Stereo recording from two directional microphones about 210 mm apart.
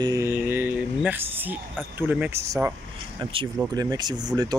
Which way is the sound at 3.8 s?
20° right (ahead or behind).